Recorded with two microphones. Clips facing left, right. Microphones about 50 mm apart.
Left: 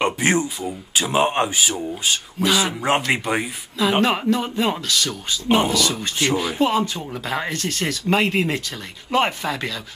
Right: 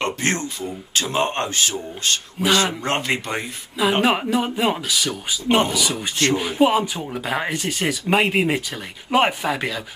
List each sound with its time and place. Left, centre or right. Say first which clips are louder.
0.0 s speech: left 4 dB; centre
4.0 s speech: even; centre